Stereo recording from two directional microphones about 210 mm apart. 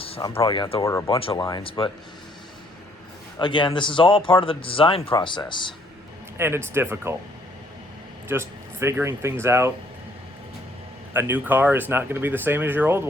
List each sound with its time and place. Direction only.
0.2 s speech: 15° left (ahead or behind)
1.1 s speech: 25° left (ahead or behind)
3.3 s speech: 20° left (ahead or behind)
6.3 s speech: 10° right (ahead or behind)
8.3 s speech: 10° right (ahead or behind)
11.1 s speech: 10° right (ahead or behind)